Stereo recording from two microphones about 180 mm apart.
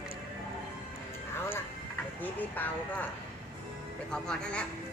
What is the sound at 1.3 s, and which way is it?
Music, 10° left (ahead or behind).